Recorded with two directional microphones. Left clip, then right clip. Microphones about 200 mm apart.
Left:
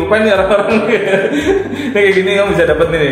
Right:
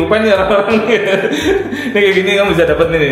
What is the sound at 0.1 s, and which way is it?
Speech, 25° right (ahead or behind).